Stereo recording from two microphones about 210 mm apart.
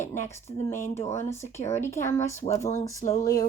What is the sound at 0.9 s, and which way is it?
Speech, 30° left (ahead or behind).